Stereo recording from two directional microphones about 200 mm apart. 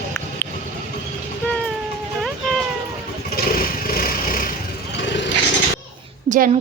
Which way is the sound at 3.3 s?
45° left (ahead or behind).